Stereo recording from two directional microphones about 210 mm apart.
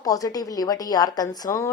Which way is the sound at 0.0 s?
15° left (ahead or behind).